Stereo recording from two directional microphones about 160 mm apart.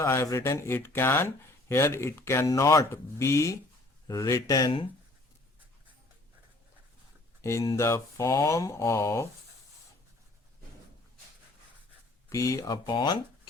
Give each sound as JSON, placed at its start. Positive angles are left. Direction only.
{"t": 0.0, "sound": "speech", "side_deg": 15}
{"t": 7.4, "sound": "speech", "side_deg": 20}
{"t": 12.3, "sound": "speech", "side_deg": 20}